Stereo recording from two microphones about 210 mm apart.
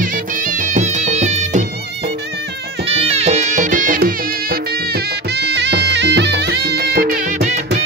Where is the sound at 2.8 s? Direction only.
30° right (ahead or behind).